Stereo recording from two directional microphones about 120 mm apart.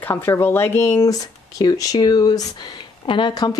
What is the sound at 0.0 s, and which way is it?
A woman's voice, 20° left (ahead or behind).